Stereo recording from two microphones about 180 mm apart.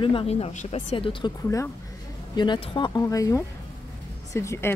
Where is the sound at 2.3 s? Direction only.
25° left (ahead or behind).